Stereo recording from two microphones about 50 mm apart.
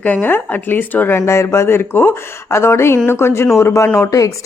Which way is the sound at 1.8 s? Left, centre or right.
Left.